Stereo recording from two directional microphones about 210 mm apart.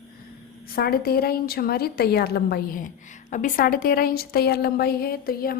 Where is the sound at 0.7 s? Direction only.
45° left (ahead or behind).